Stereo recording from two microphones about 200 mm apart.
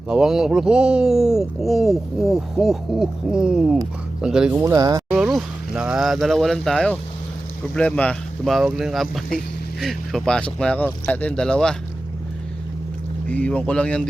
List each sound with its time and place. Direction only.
0.1 s speech: 5° right (ahead or behind)
4.5 s speech: 15° right (ahead or behind)
5.1 s speech: centre (ahead or behind)
13.2 s speech: 5° left (ahead or behind)